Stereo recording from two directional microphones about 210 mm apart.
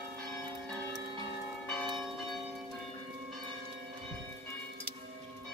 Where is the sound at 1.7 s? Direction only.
5° left (ahead or behind).